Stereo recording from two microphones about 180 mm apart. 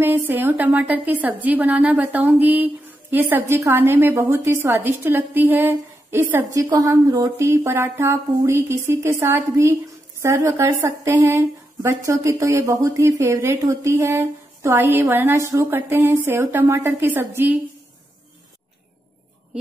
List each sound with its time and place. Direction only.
0.0 s a woman's voice: 10° right (ahead or behind)